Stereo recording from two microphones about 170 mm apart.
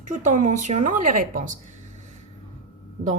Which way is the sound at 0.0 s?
45° right (ahead or behind).